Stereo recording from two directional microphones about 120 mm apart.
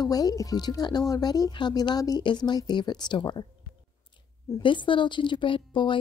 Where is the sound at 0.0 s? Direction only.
30° left (ahead or behind).